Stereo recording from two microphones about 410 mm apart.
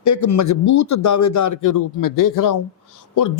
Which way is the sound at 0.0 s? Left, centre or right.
Left.